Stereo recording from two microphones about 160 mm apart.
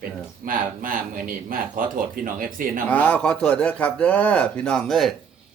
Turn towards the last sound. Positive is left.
turn(degrees=0)  # may be behind; listen again after turning